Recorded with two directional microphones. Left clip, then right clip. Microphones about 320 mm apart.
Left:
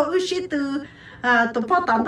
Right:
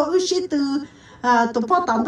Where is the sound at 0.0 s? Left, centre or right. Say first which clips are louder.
Right 2 dB; centre.